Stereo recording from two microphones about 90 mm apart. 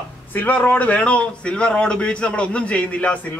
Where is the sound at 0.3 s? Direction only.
20° left (ahead or behind).